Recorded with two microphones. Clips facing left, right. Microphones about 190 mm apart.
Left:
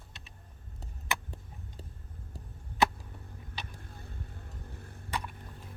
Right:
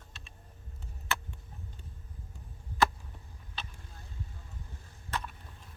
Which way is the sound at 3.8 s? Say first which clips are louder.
Left 4 dB; 55° left (ahead or behind).